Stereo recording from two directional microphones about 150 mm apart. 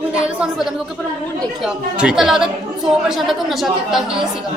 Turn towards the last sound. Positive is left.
turn(degrees=0)  # may be behind; listen again after turning